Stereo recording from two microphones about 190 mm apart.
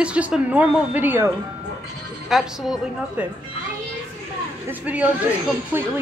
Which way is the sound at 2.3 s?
Centre (ahead or behind).